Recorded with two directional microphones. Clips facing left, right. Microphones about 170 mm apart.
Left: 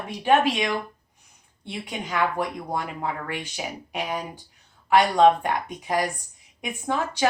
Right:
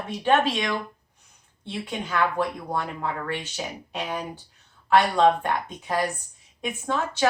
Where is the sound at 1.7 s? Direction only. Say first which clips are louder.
Right 1 dB; 15° left (ahead or behind).